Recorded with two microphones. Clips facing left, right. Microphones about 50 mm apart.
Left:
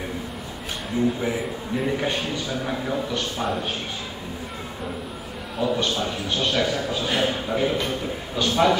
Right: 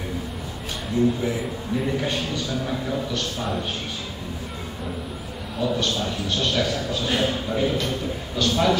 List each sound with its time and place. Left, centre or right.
0.9 s a man's voice: centre
5.6 s a man's voice: centre